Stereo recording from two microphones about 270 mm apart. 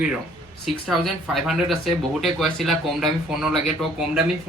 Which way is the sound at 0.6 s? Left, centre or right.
Centre.